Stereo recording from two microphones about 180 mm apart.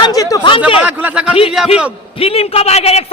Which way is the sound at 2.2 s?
30° left (ahead or behind).